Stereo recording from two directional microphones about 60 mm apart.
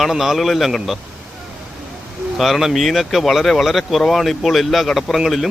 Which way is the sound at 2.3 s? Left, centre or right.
Centre.